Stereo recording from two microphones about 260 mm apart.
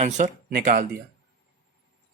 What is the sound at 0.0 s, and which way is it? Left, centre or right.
Speech, right.